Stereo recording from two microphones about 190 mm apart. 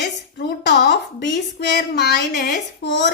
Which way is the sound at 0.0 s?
60° left (ahead or behind).